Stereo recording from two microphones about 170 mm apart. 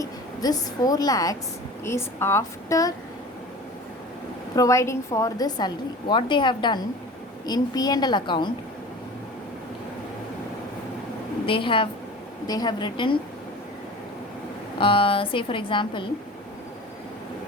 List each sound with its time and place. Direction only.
0.0 s a woman's voice: 20° left (ahead or behind)
4.5 s a woman's voice: 20° left (ahead or behind)
11.4 s a woman's voice: 30° left (ahead or behind)
14.8 s a woman's voice: 30° left (ahead or behind)